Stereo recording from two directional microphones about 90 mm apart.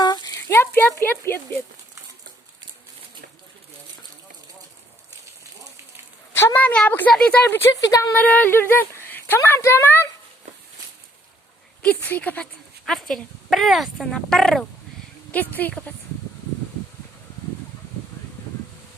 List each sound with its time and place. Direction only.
0.0 s a sound: 50° left (ahead or behind)
0.4 s speech: 25° left (ahead or behind)
6.3 s speech: 25° left (ahead or behind)
7.7 s speech: 40° left (ahead or behind)
8.1 s speech: 20° left (ahead or behind)
11.8 s speech: 15° left (ahead or behind)
12.8 s speech: 5° left (ahead or behind)
15.3 s speech: 20° left (ahead or behind)